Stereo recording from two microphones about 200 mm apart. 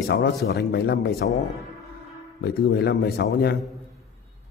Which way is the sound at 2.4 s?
55° left (ahead or behind).